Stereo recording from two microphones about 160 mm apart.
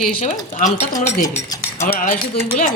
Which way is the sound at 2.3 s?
50° left (ahead or behind).